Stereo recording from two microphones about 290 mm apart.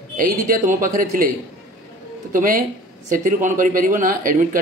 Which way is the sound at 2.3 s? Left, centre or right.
Right.